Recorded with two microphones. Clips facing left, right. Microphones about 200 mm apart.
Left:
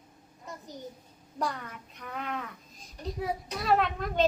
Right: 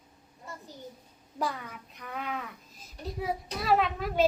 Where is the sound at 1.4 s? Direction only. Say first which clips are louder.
Even; centre (ahead or behind).